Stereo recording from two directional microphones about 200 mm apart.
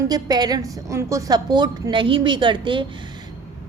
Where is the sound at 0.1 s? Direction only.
20° right (ahead or behind).